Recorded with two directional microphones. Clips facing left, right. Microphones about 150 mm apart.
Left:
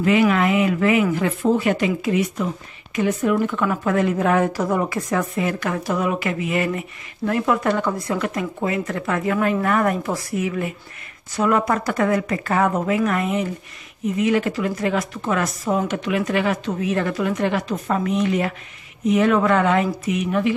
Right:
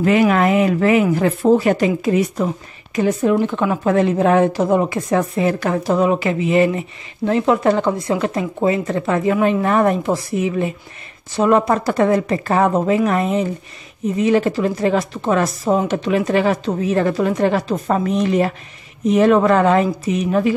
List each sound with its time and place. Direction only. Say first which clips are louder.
0.0 s a woman's voice: right 3 dB; 40° right (ahead or behind)